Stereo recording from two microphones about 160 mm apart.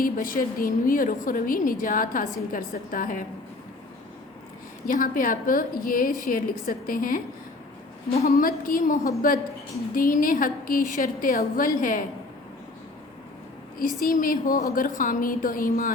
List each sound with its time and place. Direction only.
0.0 s a woman's voice: 60° left (ahead or behind)
4.9 s a woman's voice: 60° left (ahead or behind)
8.2 s a woman's voice: 60° left (ahead or behind)
13.7 s a woman's voice: 60° left (ahead or behind)